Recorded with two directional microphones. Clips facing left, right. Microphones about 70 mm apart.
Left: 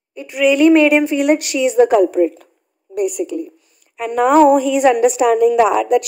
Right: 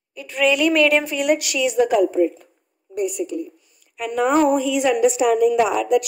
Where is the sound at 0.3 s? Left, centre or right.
Centre.